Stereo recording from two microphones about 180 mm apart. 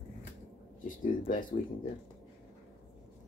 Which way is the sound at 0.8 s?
50° left (ahead or behind).